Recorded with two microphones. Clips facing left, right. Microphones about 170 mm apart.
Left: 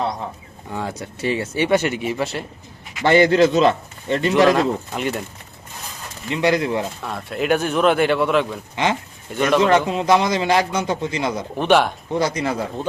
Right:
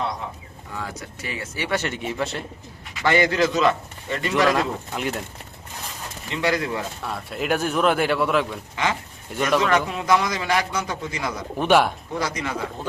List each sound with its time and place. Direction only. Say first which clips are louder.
0.7 s a man's voice: left 6 dB; 25° left (ahead or behind); by 2.4 s 5° left (ahead or behind)
3.0 s a man's voice: left 6 dB; 30° left (ahead or behind)
4.5 s speech: left 5 dB; centre (ahead or behind)
6.3 s a man's voice: left 5 dB; 20° left (ahead or behind)
7.0 s speech: left 4 dB; centre (ahead or behind)
8.7 s a man's voice: left 5 dB; 25° left (ahead or behind)
11.6 s speech: left 2 dB; 5° right (ahead or behind)
12.1 s speech: left 10 dB; 30° left (ahead or behind)